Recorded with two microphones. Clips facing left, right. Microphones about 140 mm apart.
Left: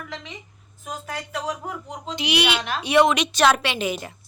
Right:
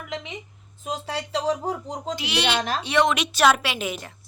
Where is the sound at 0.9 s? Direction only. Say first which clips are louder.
Right 3 dB; 25° right (ahead or behind).